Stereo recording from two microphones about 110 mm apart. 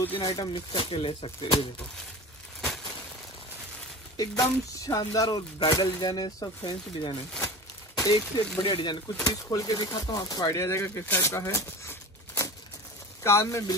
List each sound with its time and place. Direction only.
0.2 s speech: 40° left (ahead or behind)
0.7 s speech: 50° left (ahead or behind)
4.2 s speech: 30° left (ahead or behind)